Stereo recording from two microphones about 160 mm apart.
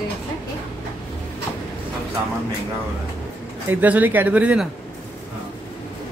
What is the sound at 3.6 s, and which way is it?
Speech, 10° right (ahead or behind).